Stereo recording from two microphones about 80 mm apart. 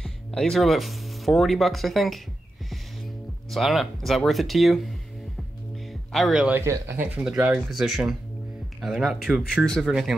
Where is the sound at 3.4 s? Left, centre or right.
Centre.